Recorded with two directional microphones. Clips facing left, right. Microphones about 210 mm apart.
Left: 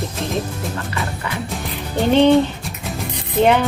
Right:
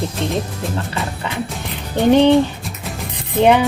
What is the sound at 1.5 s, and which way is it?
Music, centre (ahead or behind).